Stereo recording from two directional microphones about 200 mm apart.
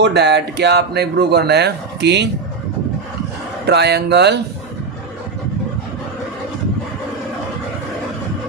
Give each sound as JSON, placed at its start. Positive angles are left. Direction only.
{"t": 0.0, "sound": "speech", "side_deg": -55}
{"t": 3.7, "sound": "speech", "side_deg": -55}